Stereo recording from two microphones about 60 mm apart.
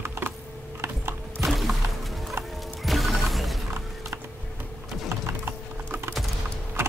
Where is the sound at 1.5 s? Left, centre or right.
Centre.